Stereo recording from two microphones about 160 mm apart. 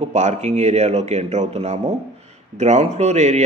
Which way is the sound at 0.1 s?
45° right (ahead or behind).